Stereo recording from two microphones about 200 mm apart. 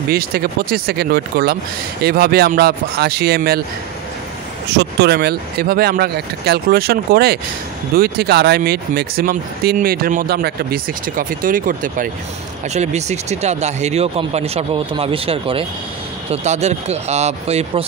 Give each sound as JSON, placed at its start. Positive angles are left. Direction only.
{"t": 0.1, "sound": "speech", "side_deg": -50}
{"t": 4.7, "sound": "speech", "side_deg": -55}